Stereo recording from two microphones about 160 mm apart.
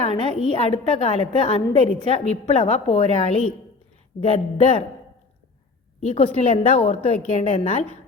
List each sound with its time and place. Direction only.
0.0 s a woman's voice: 40° left (ahead or behind)
6.0 s a woman's voice: 45° left (ahead or behind)